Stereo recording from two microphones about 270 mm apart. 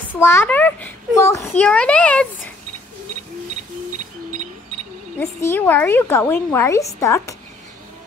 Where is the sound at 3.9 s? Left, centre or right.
Right.